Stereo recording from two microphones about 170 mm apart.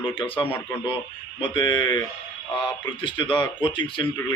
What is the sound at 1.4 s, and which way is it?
Speech, 25° left (ahead or behind).